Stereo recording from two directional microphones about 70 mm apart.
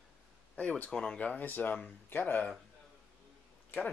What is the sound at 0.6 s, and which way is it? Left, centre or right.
Speech, centre.